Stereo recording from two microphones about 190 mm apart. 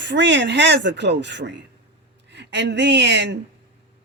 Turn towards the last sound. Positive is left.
turn(degrees=-65)  # may be behind; listen again after turning